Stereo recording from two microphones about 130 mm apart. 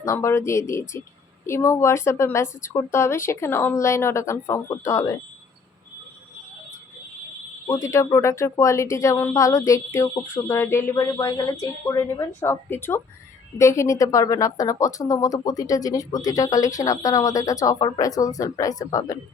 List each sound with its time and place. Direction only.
0.0 s speech: 25° left (ahead or behind)
7.7 s speech: 20° left (ahead or behind)